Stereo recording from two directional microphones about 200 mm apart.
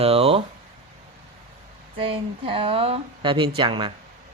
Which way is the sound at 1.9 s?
25° right (ahead or behind).